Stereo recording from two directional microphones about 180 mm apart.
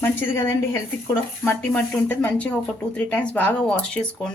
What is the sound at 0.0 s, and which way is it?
Speech, 10° left (ahead or behind).